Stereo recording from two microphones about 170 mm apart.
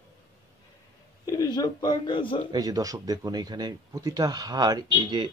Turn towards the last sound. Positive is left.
turn(degrees=-25)  # may be behind; listen again after turning